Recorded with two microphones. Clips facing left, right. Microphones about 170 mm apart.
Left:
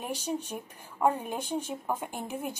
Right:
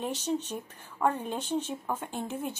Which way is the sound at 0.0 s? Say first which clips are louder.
Right 2 dB; 10° left (ahead or behind).